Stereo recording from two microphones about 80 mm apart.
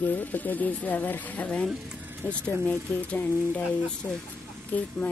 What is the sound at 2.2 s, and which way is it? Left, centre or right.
Speech, left.